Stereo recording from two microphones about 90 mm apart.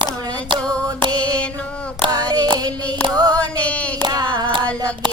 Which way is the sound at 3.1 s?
45° right (ahead or behind).